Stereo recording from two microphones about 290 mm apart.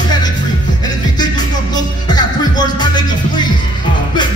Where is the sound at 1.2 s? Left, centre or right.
Centre.